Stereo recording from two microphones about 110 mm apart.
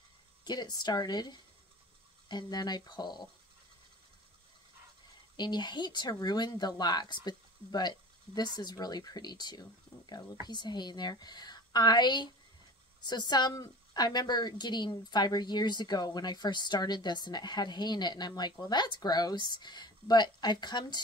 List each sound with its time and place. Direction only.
0.5 s a woman's voice: 40° left (ahead or behind)
5.3 s a woman's voice: 40° left (ahead or behind)